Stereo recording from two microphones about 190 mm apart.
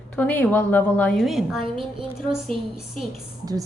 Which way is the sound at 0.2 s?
10° left (ahead or behind).